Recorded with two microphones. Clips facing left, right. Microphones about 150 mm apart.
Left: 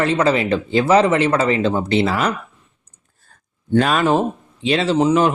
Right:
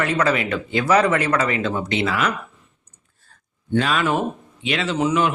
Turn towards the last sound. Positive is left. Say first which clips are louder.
# left 5 dB
turn(degrees=35)  # may be behind; listen again after turning